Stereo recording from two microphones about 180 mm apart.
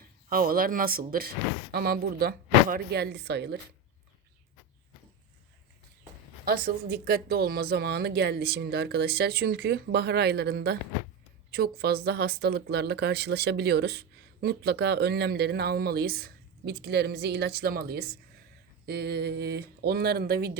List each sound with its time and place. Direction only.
0.3 s speech: 55° right (ahead or behind)
6.4 s speech: 55° right (ahead or behind)